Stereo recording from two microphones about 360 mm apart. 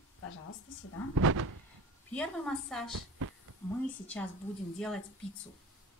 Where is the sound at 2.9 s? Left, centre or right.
Right.